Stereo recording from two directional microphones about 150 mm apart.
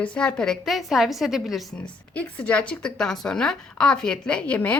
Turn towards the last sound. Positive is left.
turn(degrees=10)  # may be behind; listen again after turning